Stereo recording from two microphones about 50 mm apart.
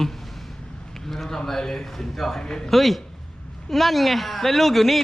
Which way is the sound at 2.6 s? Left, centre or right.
Centre.